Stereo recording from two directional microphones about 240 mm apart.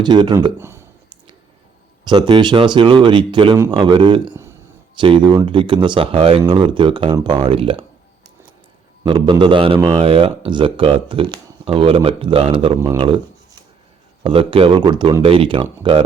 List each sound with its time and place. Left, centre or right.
0.0 s speech: centre
2.0 s a man's voice: centre
9.0 s a man's voice: right
14.3 s a man's voice: right